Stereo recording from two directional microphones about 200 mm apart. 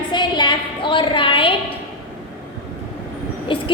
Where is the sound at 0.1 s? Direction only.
20° left (ahead or behind).